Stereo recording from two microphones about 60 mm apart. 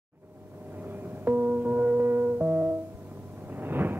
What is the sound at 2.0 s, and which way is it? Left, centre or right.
Music, right.